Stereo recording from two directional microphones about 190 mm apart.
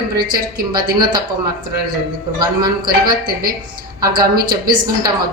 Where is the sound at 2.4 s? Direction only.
20° right (ahead or behind).